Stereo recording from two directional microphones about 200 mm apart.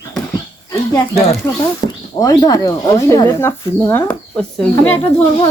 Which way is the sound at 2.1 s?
20° left (ahead or behind).